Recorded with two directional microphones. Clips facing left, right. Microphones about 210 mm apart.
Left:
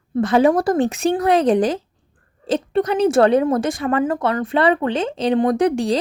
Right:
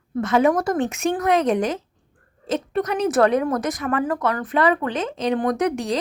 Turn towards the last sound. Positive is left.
turn(degrees=30)  # may be behind; listen again after turning